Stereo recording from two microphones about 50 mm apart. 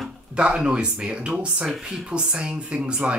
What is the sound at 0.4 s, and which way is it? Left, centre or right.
Speech, right.